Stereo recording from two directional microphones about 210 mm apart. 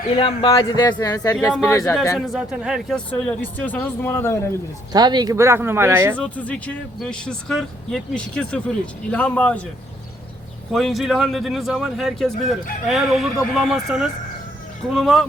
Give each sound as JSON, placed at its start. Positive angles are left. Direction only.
{"t": 0.2, "sound": "speech", "side_deg": 25}
{"t": 2.1, "sound": "speech", "side_deg": 0}
{"t": 4.9, "sound": "speech", "side_deg": -20}
{"t": 6.1, "sound": "speech", "side_deg": 5}
{"t": 10.7, "sound": "speech", "side_deg": 0}